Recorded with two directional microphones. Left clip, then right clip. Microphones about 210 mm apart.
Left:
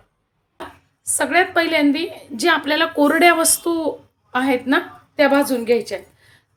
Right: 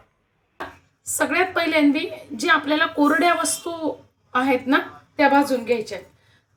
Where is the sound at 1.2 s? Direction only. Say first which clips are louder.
Left 4 dB; 25° left (ahead or behind).